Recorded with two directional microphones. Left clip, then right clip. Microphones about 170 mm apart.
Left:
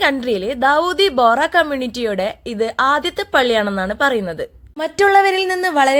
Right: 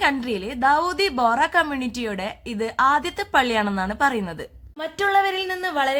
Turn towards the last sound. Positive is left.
turn(degrees=40)  # may be behind; listen again after turning